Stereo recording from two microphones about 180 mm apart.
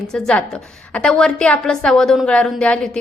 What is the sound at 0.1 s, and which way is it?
A woman's voice, 5° left (ahead or behind).